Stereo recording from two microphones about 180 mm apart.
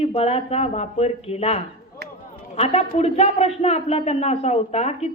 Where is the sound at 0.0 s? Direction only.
35° left (ahead or behind).